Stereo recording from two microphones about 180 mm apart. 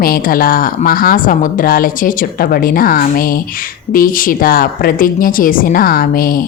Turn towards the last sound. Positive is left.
turn(degrees=55)  # may be behind; listen again after turning